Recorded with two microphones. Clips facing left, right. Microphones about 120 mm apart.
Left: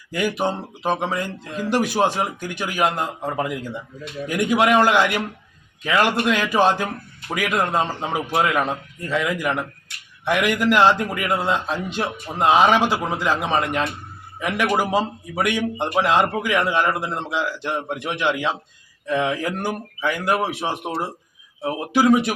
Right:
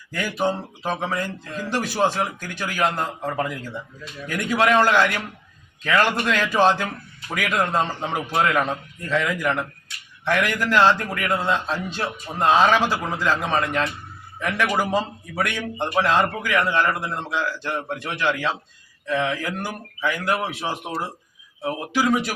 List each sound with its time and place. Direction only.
0.1 s speech: 15° left (ahead or behind)